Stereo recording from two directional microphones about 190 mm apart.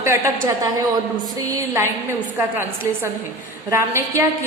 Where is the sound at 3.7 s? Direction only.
15° right (ahead or behind).